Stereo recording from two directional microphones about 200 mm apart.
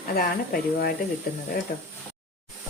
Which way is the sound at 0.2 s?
50° left (ahead or behind).